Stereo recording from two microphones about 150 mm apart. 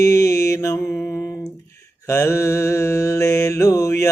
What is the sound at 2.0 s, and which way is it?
Mantra, 20° left (ahead or behind).